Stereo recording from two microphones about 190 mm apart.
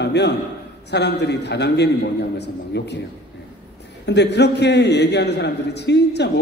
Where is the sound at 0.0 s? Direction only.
65° left (ahead or behind).